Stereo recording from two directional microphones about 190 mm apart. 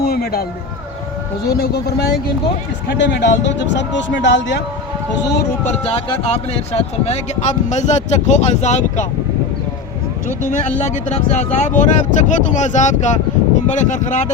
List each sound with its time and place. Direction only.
0.0 s a sound: 55° left (ahead or behind)
1.5 s speech: 55° left (ahead or behind)
6.3 s speech: 35° left (ahead or behind)
10.2 s speech: 40° left (ahead or behind)